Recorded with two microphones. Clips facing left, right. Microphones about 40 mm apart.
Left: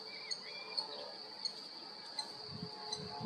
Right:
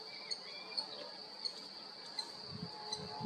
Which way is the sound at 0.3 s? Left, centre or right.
Centre.